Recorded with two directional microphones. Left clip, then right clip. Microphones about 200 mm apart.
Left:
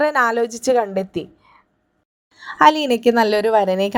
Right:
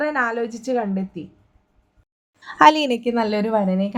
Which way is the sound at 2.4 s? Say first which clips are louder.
Even; centre (ahead or behind).